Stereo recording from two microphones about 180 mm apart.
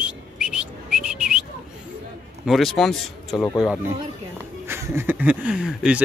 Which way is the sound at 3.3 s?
15° left (ahead or behind).